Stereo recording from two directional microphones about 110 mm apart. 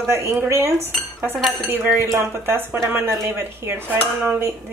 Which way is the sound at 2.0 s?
20° right (ahead or behind).